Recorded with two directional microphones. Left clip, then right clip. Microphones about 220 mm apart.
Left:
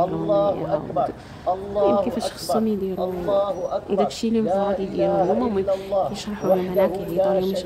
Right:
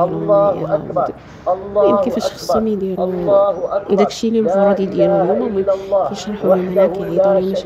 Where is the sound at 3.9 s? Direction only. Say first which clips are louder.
Right 7 dB; 20° right (ahead or behind).